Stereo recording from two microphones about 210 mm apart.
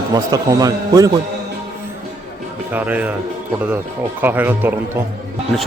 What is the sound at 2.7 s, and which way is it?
Speech, 10° right (ahead or behind).